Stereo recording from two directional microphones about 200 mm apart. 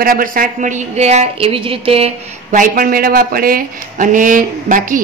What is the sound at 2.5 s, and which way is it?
Speech, 45° right (ahead or behind).